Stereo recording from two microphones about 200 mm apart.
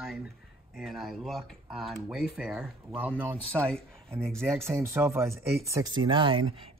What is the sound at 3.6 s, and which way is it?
Speech, 5° left (ahead or behind).